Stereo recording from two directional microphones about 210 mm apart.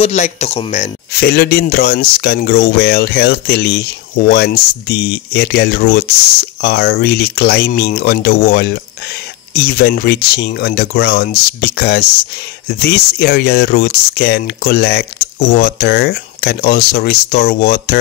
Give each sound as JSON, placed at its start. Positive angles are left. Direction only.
{"t": 0.0, "sound": "speech", "side_deg": 30}
{"t": 1.2, "sound": "speech", "side_deg": 50}